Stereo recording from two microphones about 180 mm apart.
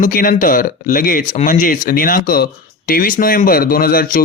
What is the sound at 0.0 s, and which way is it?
Speech, 50° left (ahead or behind).